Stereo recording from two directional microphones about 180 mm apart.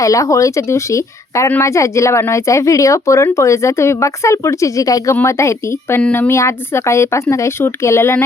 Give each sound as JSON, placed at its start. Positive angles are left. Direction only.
{"t": 0.0, "sound": "speech", "side_deg": 20}